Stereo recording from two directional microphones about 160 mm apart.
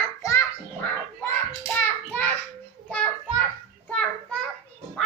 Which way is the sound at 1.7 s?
15° left (ahead or behind).